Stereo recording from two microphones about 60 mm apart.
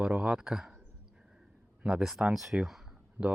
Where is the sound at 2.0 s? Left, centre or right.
Centre.